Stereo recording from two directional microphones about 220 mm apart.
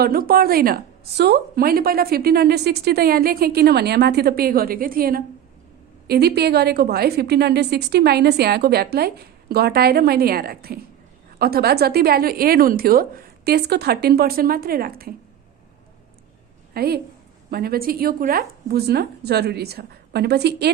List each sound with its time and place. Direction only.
0.0 s a woman's voice: 45° right (ahead or behind)
16.7 s a woman's voice: 45° right (ahead or behind)